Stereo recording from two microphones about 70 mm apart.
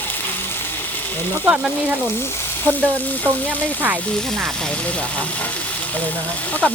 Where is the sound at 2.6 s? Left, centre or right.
Left.